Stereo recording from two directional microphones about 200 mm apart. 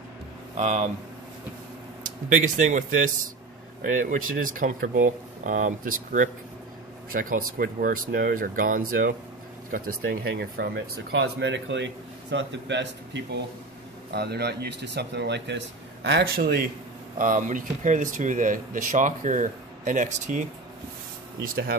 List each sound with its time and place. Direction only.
0.6 s speech: 35° right (ahead or behind)
2.0 s speech: 40° right (ahead or behind)
7.1 s speech: 45° right (ahead or behind)